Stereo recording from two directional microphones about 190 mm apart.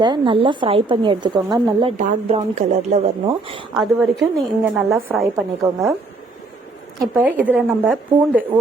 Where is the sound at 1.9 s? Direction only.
35° right (ahead or behind).